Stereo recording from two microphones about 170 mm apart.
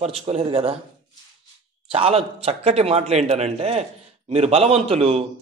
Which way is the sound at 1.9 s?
35° right (ahead or behind).